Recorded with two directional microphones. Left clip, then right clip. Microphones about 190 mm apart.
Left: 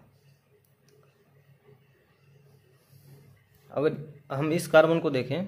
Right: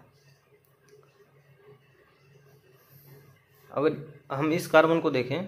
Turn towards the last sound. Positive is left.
turn(degrees=20)  # may be behind; listen again after turning